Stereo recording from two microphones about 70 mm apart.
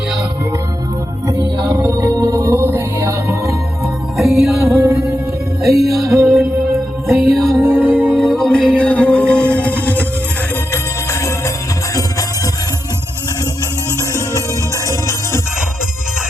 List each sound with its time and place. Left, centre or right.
1.3 s music: right
4.2 s music: centre
4.6 s music: right
5.6 s music: centre
7.2 s music: centre
7.5 s music: right
8.2 s music: centre; by 10.1 s left
14.8 s music: left